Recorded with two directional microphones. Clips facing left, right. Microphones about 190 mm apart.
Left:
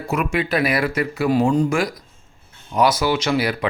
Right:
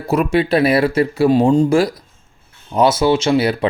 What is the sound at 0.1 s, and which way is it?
Speech, 35° right (ahead or behind).